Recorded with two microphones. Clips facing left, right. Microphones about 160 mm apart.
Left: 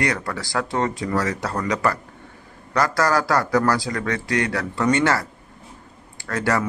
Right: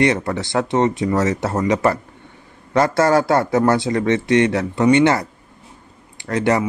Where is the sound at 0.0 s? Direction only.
25° right (ahead or behind).